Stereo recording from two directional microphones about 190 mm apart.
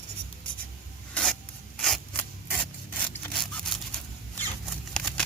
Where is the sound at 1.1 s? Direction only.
5° left (ahead or behind).